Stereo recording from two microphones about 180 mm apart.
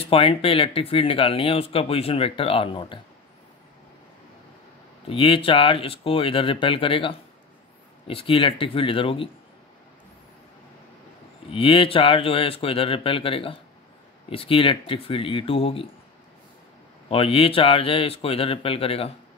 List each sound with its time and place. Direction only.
0.0 s speech: 30° left (ahead or behind)
5.0 s speech: 30° left (ahead or behind)
11.5 s speech: 30° left (ahead or behind)
17.1 s speech: 30° left (ahead or behind)